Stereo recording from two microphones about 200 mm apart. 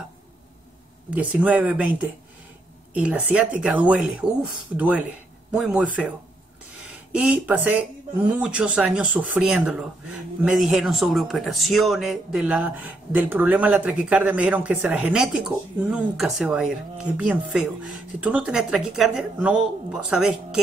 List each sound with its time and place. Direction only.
1.1 s a man's voice: 5° right (ahead or behind)
7.2 s a man's voice: 5° right (ahead or behind)